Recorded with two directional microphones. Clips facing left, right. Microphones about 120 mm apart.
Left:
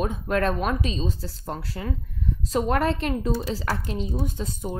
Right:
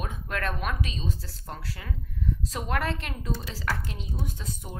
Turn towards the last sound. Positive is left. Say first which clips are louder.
# left 7 dB
turn(degrees=30)  # may be behind; listen again after turning